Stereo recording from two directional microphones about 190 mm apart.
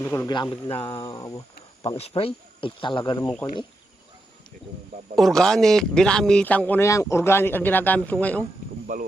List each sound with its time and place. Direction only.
0.0 s a man's voice: 15° left (ahead or behind)
0.5 s speech: 25° left (ahead or behind)
1.8 s speech: 30° left (ahead or behind)
5.1 s a man's voice: centre (ahead or behind)
8.9 s speech: 45° right (ahead or behind)